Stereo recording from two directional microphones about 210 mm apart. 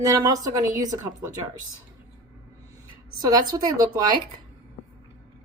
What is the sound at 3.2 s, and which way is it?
Speech, 20° right (ahead or behind).